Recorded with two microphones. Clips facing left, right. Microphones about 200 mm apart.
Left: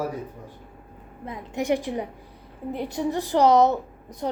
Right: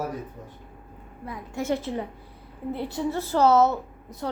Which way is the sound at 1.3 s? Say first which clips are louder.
Left 3 dB; 20° left (ahead or behind).